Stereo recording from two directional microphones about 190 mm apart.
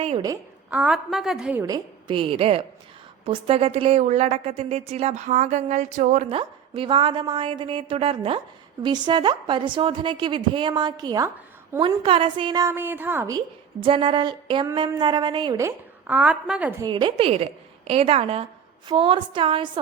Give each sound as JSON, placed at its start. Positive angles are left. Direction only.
{"t": 0.7, "sound": "a woman's voice", "side_deg": -5}
{"t": 1.6, "sound": "a woman's voice", "side_deg": -25}
{"t": 6.2, "sound": "a woman's voice", "side_deg": -30}
{"t": 13.8, "sound": "a woman's voice", "side_deg": -25}
{"t": 16.8, "sound": "a woman's voice", "side_deg": -25}